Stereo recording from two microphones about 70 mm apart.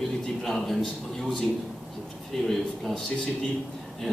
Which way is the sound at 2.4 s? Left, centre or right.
Centre.